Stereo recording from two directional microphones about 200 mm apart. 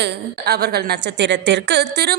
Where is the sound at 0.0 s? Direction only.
50° right (ahead or behind).